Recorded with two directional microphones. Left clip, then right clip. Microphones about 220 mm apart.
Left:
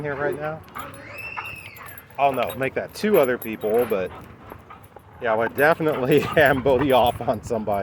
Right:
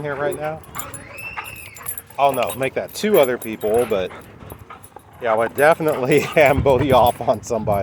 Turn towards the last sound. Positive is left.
turn(degrees=-20)  # may be behind; listen again after turning